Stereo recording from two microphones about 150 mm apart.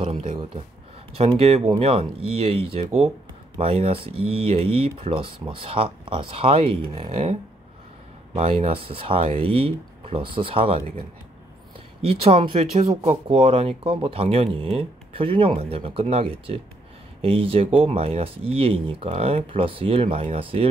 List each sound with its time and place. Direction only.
1.1 s speech: 40° right (ahead or behind)
8.4 s speech: 40° right (ahead or behind)
12.0 s speech: 35° right (ahead or behind)